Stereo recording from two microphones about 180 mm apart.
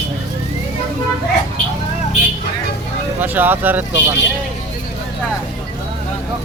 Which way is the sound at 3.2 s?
10° right (ahead or behind).